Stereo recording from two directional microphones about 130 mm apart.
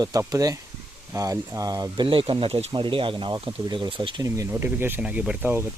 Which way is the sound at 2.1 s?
40° right (ahead or behind).